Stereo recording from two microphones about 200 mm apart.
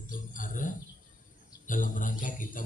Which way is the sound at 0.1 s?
40° left (ahead or behind).